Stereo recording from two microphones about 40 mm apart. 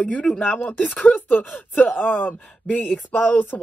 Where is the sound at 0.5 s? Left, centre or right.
Left.